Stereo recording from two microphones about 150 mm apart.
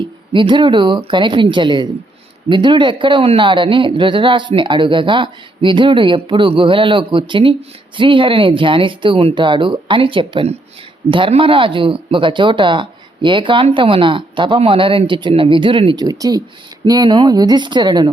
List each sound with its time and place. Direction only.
0.3 s speech: 35° right (ahead or behind)